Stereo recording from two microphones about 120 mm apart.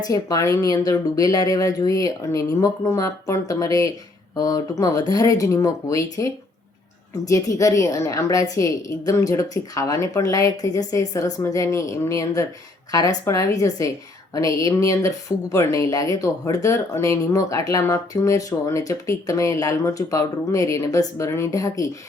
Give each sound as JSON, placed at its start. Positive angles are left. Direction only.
{"t": 0.1, "sound": "speech", "side_deg": 30}